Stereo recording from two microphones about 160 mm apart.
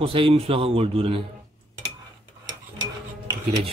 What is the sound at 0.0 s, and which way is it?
Speech, 35° right (ahead or behind).